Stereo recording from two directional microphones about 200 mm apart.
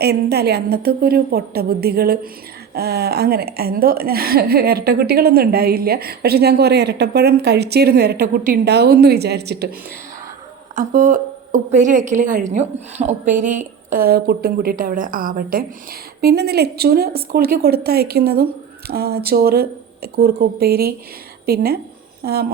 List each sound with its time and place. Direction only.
0.0 s a woman's voice: 55° right (ahead or behind)
10.8 s a woman's voice: 40° right (ahead or behind)